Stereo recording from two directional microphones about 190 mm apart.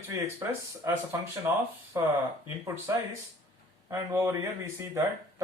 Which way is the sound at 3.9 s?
15° right (ahead or behind).